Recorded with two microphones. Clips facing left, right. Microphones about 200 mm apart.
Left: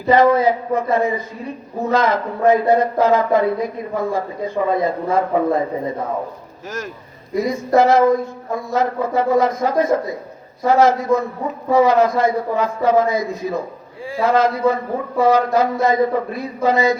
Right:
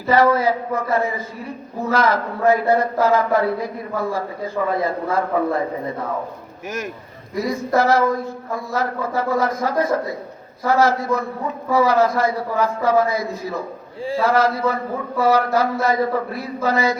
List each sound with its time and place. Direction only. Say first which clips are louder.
0.0 s speech: left 3 dB; 20° left (ahead or behind)
7.3 s speech: left 4 dB; 20° left (ahead or behind)